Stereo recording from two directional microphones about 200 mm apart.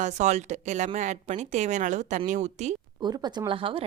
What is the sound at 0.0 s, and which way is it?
Speech, 35° right (ahead or behind).